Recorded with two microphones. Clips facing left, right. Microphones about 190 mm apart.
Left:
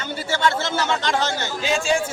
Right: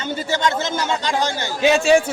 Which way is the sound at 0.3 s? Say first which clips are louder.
Even; 15° right (ahead or behind).